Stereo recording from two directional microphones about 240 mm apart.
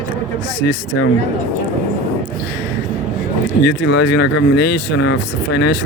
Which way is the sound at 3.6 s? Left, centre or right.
Left.